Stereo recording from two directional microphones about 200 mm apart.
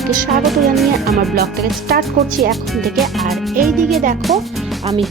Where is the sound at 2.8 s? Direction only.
Centre (ahead or behind).